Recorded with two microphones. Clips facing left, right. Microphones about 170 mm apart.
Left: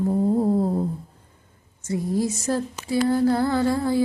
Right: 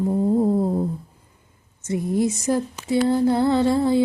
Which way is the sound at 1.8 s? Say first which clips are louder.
Right 2 dB; 20° right (ahead or behind).